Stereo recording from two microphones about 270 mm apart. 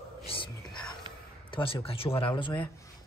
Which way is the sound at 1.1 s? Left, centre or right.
Centre.